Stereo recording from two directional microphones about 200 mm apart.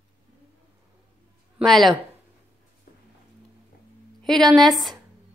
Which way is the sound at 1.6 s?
Centre (ahead or behind).